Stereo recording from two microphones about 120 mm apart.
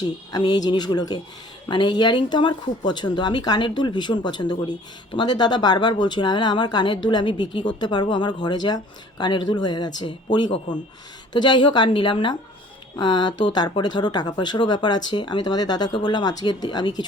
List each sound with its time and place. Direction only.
0.0 s speech: 35° left (ahead or behind)
11.3 s speech: 40° left (ahead or behind)